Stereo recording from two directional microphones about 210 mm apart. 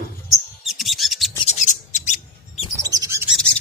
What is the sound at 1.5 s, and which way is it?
Bird, 35° left (ahead or behind).